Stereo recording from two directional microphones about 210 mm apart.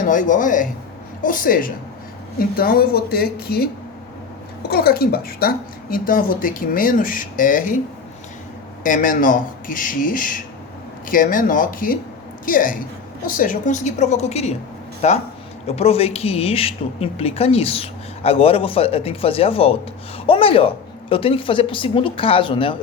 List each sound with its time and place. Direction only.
0.0 s a woman's voice: 40° left (ahead or behind)
4.7 s a woman's voice: 45° left (ahead or behind)
8.8 s a woman's voice: 40° left (ahead or behind); by 22.8 s 25° left (ahead or behind)